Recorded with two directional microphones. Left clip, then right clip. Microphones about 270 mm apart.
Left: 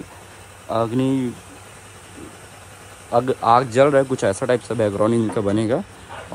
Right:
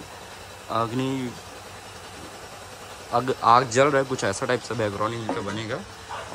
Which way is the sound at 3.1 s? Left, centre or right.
Centre.